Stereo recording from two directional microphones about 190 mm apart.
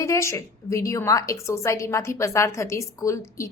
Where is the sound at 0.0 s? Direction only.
15° left (ahead or behind).